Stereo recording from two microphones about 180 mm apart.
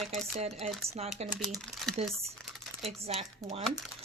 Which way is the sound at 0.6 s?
35° right (ahead or behind).